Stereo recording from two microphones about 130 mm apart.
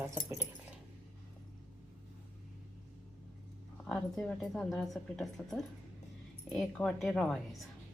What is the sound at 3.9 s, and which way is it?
A woman's voice, 5° left (ahead or behind).